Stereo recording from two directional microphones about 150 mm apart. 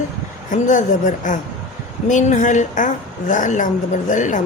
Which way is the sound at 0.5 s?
55° left (ahead or behind).